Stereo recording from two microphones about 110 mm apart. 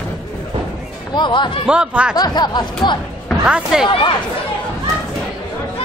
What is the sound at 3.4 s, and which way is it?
Speech, 5° right (ahead or behind).